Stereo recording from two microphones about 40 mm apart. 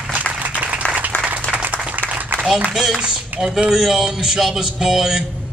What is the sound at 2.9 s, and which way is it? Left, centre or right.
A man's voice, right.